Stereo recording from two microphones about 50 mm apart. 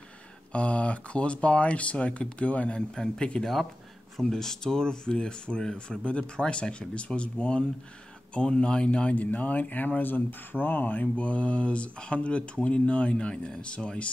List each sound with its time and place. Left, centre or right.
0.5 s speech: left